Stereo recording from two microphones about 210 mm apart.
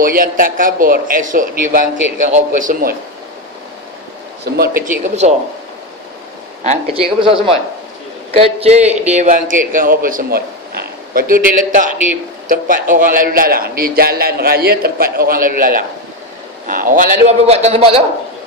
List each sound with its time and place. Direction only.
0.0 s a man's voice: 40° right (ahead or behind)
4.6 s a man's voice: 40° right (ahead or behind)
6.6 s a man's voice: 30° right (ahead or behind)